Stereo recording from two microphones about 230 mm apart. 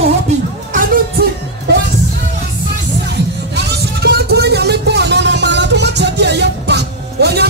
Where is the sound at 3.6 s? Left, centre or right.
Right.